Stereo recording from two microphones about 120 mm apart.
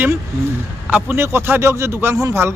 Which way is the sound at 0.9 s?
15° right (ahead or behind).